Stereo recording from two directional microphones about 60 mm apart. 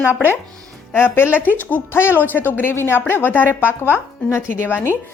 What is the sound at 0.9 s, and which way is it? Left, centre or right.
Speech, left.